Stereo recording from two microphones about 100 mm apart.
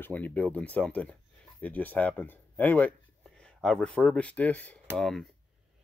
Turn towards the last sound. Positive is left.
turn(degrees=5)  # may be behind; listen again after turning